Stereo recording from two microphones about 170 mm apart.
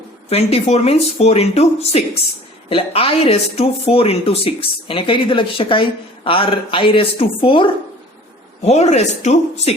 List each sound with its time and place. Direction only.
0.3 s speech: 35° left (ahead or behind)